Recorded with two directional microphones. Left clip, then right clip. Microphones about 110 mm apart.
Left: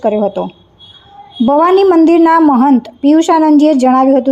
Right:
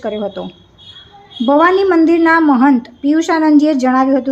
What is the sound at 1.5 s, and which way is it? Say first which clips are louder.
A woman's voice: left 2 dB; 50° left (ahead or behind).